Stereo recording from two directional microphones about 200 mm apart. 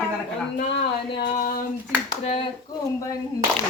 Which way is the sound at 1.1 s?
50° left (ahead or behind).